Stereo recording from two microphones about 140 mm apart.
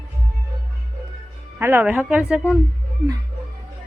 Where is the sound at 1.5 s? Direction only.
15° right (ahead or behind).